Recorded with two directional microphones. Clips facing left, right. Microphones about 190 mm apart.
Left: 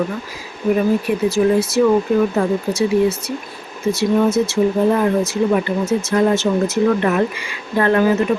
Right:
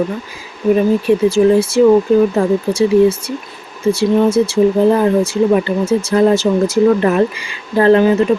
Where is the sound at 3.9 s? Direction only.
30° right (ahead or behind).